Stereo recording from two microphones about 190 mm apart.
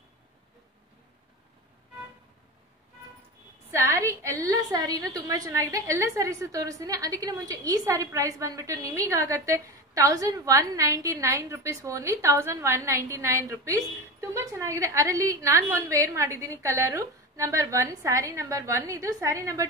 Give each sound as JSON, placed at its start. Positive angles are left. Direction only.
{"t": 3.7, "sound": "a woman's voice", "side_deg": -15}